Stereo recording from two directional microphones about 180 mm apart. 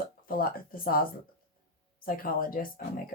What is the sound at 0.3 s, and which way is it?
Speech, 55° left (ahead or behind).